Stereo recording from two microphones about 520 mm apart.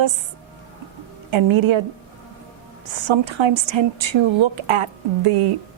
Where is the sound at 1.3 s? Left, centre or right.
Right.